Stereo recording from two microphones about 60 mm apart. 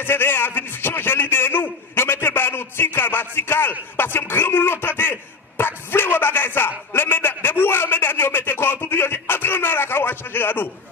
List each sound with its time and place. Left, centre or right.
0.0 s a man's voice: left
5.6 s bow-wow: left
6.9 s a sound: left